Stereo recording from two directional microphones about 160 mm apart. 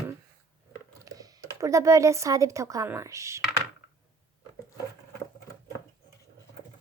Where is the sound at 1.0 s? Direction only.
20° right (ahead or behind).